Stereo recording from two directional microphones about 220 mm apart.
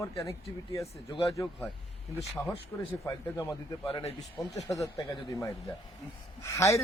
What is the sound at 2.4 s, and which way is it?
Speech, 10° left (ahead or behind).